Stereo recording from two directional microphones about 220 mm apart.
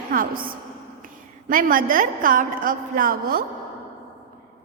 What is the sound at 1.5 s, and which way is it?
A woman's voice, 40° right (ahead or behind).